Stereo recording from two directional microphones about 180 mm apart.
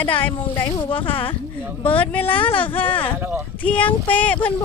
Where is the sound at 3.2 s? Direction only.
10° right (ahead or behind).